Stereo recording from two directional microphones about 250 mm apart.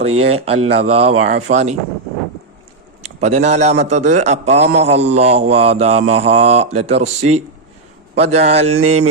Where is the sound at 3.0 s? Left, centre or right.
Right.